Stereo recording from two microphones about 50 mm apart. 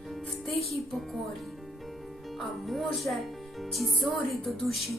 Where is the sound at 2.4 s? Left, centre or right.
Centre.